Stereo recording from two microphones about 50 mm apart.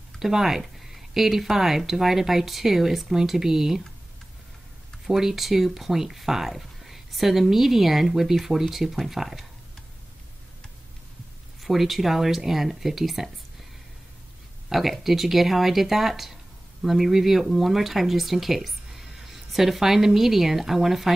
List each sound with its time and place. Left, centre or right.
0.2 s speech: centre
5.0 s speech: centre
11.6 s speech: centre
14.7 s speech: centre